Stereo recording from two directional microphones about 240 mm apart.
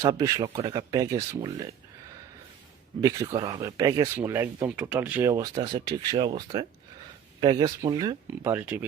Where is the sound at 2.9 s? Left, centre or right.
Centre.